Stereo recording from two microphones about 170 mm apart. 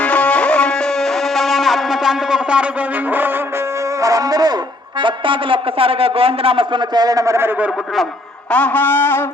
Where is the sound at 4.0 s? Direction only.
20° right (ahead or behind).